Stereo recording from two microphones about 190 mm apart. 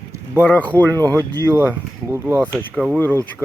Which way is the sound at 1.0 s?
20° right (ahead or behind).